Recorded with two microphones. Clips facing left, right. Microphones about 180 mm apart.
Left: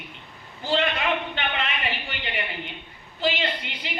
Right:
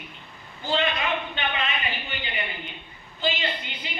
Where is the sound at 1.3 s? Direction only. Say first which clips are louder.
Even; 75° left (ahead or behind).